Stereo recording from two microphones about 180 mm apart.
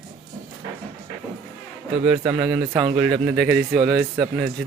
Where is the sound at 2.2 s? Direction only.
30° right (ahead or behind).